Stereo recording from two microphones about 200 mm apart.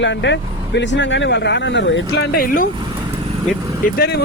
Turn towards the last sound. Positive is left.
turn(degrees=50)  # may be behind; listen again after turning